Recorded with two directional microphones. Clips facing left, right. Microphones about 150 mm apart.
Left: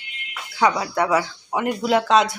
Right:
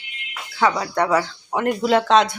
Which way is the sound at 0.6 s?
15° left (ahead or behind).